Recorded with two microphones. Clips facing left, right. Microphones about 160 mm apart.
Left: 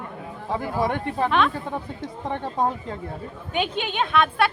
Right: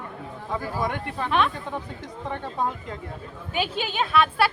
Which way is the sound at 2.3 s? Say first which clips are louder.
Left 4 dB; 35° left (ahead or behind).